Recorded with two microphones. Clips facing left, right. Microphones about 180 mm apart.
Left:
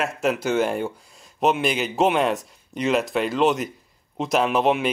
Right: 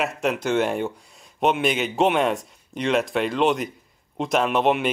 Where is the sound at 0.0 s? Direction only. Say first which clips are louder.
Left 1 dB; centre (ahead or behind).